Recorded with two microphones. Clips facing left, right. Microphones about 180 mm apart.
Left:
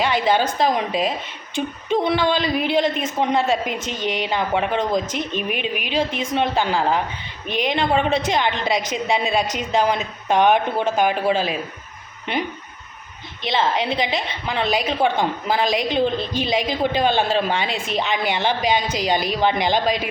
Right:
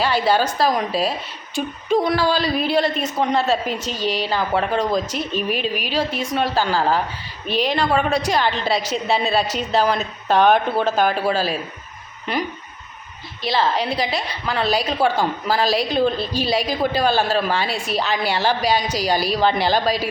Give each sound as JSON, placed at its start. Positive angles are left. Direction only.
{"t": 0.0, "sound": "a woman's voice", "side_deg": 20}
{"t": 13.4, "sound": "a woman's voice", "side_deg": 20}